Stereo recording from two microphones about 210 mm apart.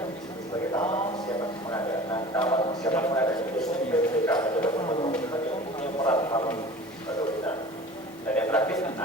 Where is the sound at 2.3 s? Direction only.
15° left (ahead or behind).